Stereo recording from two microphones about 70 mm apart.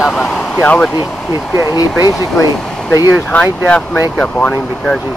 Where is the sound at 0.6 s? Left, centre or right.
Centre.